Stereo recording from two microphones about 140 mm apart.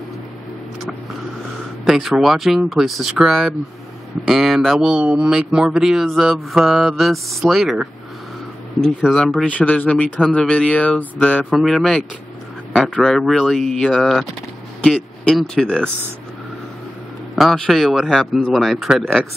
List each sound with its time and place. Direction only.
1.9 s speech: centre (ahead or behind)
17.4 s speech: centre (ahead or behind)